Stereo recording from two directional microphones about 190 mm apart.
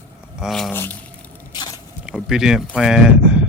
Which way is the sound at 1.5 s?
20° left (ahead or behind).